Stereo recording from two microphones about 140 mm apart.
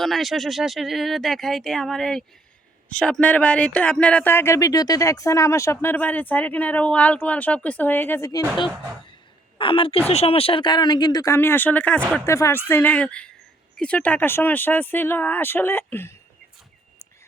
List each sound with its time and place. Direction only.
0.0 s speech: centre (ahead or behind); by 8.4 s 20° left (ahead or behind)
9.6 s speech: 40° left (ahead or behind)
11.3 s speech: 15° left (ahead or behind)